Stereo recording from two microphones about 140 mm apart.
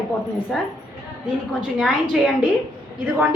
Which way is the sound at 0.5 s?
Centre (ahead or behind).